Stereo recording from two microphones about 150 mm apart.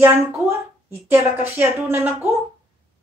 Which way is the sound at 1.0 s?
15° right (ahead or behind).